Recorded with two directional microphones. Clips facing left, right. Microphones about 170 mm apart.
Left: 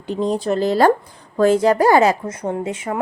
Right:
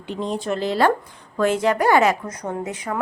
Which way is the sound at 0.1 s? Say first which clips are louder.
Left 5 dB; 40° left (ahead or behind).